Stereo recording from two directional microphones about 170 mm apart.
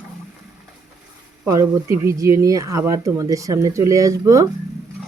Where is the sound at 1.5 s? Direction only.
20° right (ahead or behind).